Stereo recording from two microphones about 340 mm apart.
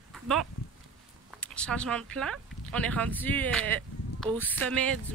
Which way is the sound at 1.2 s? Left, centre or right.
Centre.